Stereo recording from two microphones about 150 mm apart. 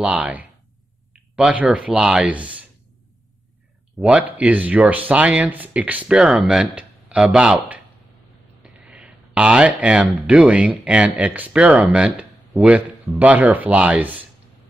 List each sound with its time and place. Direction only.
0.0 s speech: 10° right (ahead or behind)
4.0 s speech: 10° right (ahead or behind)